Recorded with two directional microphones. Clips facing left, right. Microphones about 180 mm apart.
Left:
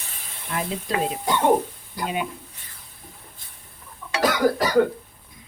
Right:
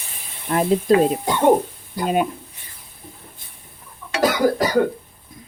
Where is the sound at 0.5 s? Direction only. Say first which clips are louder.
Right 11 dB; 45° right (ahead or behind).